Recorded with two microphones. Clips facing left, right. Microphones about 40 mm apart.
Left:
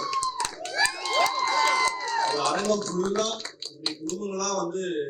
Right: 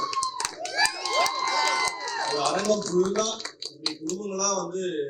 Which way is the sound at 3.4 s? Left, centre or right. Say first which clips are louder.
Even; left.